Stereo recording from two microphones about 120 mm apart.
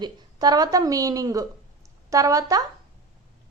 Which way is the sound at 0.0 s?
35° right (ahead or behind).